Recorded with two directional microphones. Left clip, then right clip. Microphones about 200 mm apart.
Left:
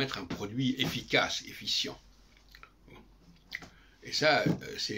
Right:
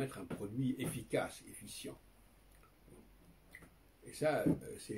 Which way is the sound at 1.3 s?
15° right (ahead or behind).